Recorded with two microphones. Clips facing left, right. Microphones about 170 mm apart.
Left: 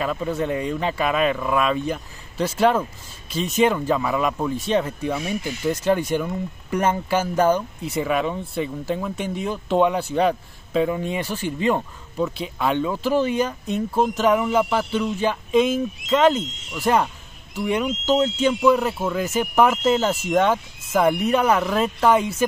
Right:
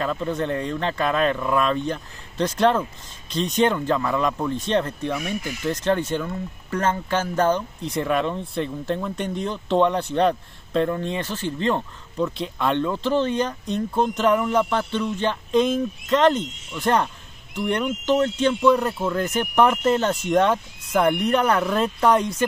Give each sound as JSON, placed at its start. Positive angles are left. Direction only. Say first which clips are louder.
{"t": 0.0, "sound": "speech", "louder": "left 1 dB", "side_deg": 5}
{"t": 5.1, "sound": "speech", "louder": "left 2 dB", "side_deg": 25}
{"t": 5.7, "sound": "speech", "louder": "left 2 dB", "side_deg": 10}